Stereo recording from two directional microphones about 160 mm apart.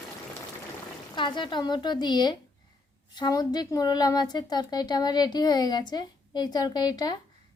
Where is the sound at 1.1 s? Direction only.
30° left (ahead or behind).